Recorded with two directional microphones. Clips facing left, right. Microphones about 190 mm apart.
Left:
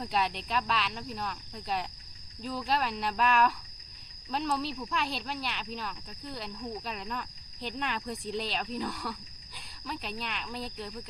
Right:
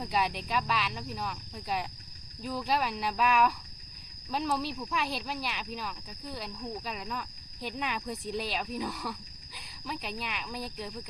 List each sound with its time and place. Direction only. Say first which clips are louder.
0.0 s speech: even; centre (ahead or behind)